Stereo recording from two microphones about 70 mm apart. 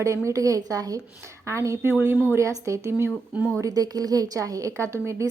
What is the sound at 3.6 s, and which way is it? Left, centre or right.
A woman's voice, right.